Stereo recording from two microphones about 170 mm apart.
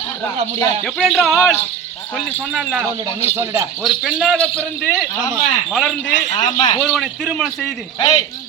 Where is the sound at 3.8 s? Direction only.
Centre (ahead or behind).